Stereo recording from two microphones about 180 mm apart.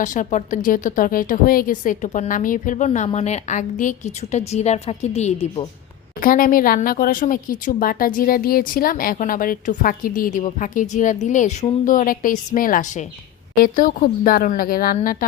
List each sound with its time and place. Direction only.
0.0 s speech: 45° left (ahead or behind)
6.2 s speech: 50° left (ahead or behind)